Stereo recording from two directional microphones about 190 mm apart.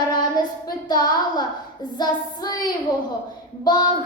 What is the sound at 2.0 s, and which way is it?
A child's voice, 20° left (ahead or behind).